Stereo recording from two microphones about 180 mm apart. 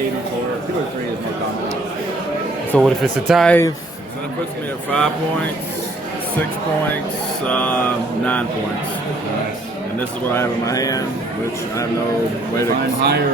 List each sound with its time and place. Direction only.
2.7 s speech: centre (ahead or behind)
4.9 s speech: 5° left (ahead or behind)
7.4 s speech: 5° left (ahead or behind)
10.0 s speech: 15° left (ahead or behind)
13.0 s speech: 65° right (ahead or behind)